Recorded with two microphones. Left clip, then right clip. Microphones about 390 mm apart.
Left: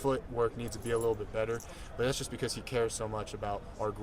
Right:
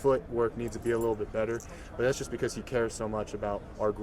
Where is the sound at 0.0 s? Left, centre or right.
Left.